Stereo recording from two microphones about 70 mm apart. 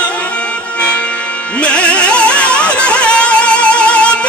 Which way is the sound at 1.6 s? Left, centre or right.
Centre.